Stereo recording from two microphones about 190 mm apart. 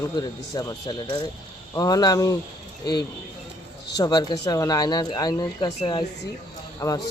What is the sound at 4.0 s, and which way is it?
Speech, 20° left (ahead or behind).